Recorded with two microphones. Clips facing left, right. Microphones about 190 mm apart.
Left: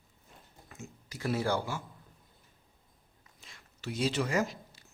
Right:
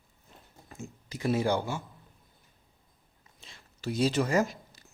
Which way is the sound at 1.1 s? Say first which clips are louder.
Right 4 dB; 20° right (ahead or behind).